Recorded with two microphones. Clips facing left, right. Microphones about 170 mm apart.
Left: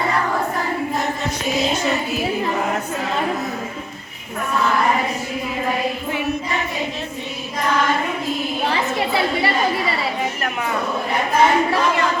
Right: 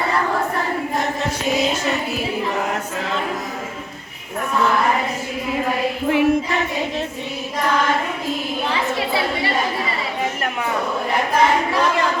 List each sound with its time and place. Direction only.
6.1 s choir: 90° right